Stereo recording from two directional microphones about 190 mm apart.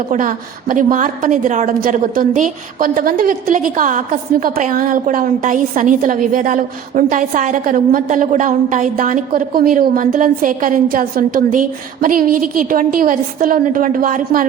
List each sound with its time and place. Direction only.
0.1 s a woman's voice: 45° right (ahead or behind)